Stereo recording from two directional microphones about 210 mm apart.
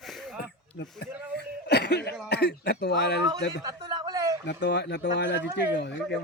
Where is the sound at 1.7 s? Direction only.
50° left (ahead or behind).